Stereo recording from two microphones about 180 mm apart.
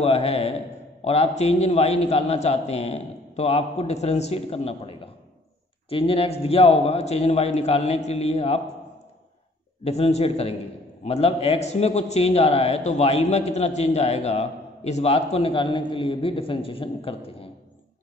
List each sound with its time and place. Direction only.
0.0 s a man's voice: 35° left (ahead or behind)
9.8 s a man's voice: 35° left (ahead or behind)